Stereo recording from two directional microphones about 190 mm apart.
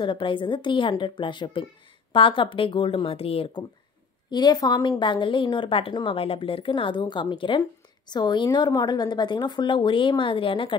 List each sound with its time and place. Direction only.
0.0 s a woman's voice: 25° left (ahead or behind)